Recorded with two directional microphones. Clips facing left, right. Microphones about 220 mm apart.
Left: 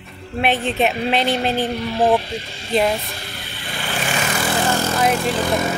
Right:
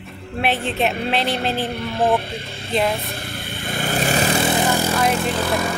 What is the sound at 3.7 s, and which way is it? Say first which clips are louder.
Vehicle: right 4 dB; 45° right (ahead or behind).